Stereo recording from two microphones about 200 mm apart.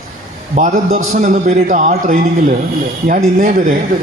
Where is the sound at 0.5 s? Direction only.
35° right (ahead or behind).